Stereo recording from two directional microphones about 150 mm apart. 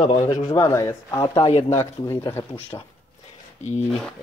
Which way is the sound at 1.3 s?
35° left (ahead or behind).